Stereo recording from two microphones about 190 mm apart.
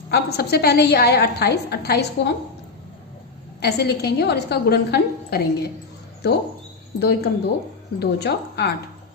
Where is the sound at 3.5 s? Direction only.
60° left (ahead or behind).